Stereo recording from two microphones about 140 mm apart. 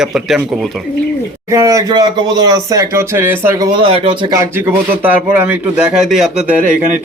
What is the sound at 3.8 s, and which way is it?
Speech, 40° right (ahead or behind).